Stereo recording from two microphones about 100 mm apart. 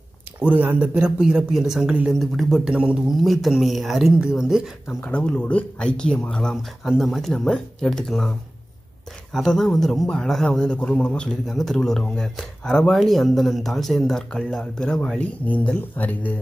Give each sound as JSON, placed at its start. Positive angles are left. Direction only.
{"t": 0.4, "sound": "a man's voice", "side_deg": -15}
{"t": 5.0, "sound": "speech", "side_deg": 10}
{"t": 6.5, "sound": "a man's voice", "side_deg": 0}
{"t": 9.3, "sound": "a man's voice", "side_deg": 5}